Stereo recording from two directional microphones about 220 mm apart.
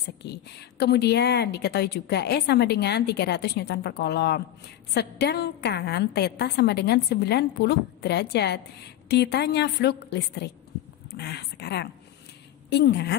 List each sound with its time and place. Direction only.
0.2 s a woman's voice: 50° left (ahead or behind)